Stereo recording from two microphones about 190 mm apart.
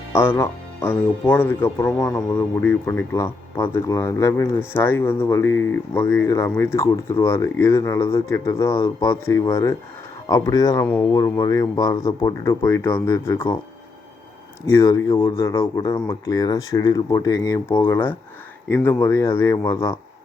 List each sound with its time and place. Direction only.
0.1 s speech: 15° left (ahead or behind)
14.7 s speech: 15° left (ahead or behind)